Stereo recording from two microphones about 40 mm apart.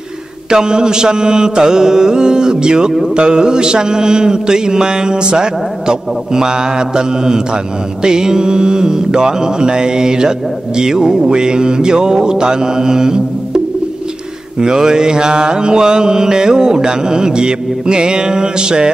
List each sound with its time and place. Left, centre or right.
0.5 s mantra: centre
14.6 s mantra: centre